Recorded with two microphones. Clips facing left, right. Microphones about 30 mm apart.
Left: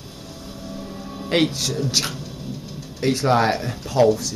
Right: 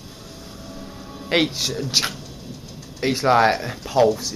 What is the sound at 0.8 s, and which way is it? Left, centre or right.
Music, centre.